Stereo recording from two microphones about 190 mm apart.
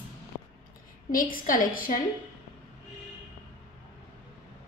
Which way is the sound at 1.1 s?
45° left (ahead or behind).